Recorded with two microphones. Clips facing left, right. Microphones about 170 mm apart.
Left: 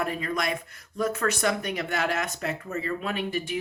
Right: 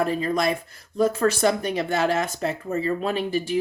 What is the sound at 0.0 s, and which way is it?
Speech, 30° right (ahead or behind).